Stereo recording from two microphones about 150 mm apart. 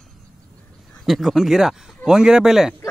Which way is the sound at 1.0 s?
Centre (ahead or behind).